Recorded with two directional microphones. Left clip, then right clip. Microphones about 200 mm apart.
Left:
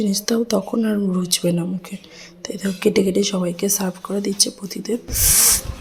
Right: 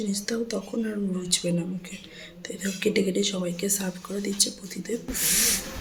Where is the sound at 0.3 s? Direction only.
30° left (ahead or behind).